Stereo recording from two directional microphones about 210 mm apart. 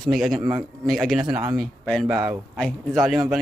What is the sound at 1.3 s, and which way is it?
Speech, 15° right (ahead or behind).